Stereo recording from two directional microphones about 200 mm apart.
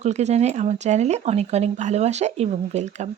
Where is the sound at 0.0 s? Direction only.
35° right (ahead or behind).